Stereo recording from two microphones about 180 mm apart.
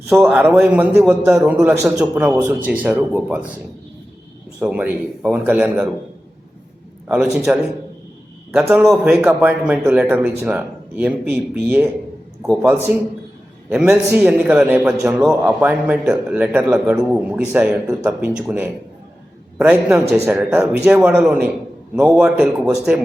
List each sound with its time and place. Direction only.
0.1 s a man's voice: 10° right (ahead or behind)
4.6 s a man's voice: 10° right (ahead or behind)
7.3 s a man's voice: 5° right (ahead or behind)
8.7 s a man's voice: 5° right (ahead or behind)